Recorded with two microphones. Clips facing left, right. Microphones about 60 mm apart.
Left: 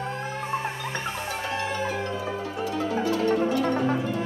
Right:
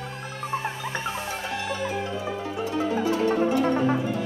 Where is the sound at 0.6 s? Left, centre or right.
Centre.